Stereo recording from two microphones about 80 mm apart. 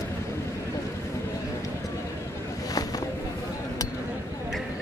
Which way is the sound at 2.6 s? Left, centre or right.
Left.